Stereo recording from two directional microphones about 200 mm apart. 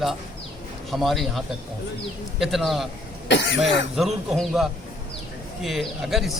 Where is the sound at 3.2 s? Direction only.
65° left (ahead or behind).